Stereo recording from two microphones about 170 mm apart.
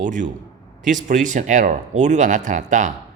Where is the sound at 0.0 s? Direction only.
50° right (ahead or behind).